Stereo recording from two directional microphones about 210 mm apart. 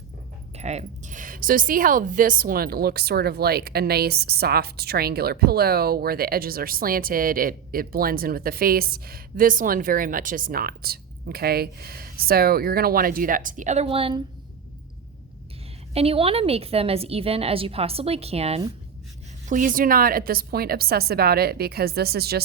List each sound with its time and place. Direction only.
0.5 s a woman's voice: 30° right (ahead or behind)
16.0 s a woman's voice: 25° right (ahead or behind)
19.5 s a woman's voice: 40° right (ahead or behind)